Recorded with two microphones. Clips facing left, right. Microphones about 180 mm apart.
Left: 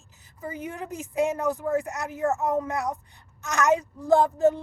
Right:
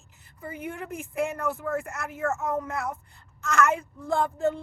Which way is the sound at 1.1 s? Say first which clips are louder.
Left 4 dB; 15° left (ahead or behind).